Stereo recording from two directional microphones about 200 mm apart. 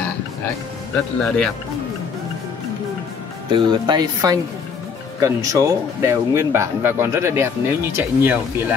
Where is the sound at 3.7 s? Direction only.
20° right (ahead or behind).